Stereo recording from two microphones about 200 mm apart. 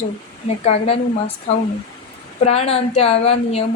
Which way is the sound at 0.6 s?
30° left (ahead or behind).